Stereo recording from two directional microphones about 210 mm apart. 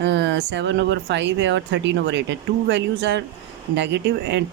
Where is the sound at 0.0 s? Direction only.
60° right (ahead or behind).